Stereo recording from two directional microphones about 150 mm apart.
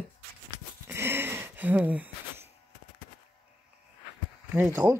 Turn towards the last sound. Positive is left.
turn(degrees=-10)  # may be behind; listen again after turning